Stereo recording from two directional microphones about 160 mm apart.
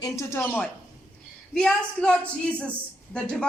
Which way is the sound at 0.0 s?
20° left (ahead or behind).